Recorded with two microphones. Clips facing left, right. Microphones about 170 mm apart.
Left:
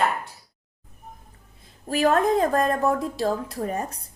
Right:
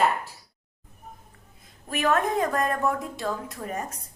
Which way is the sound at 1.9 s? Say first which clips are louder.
Left 4 dB; 30° left (ahead or behind).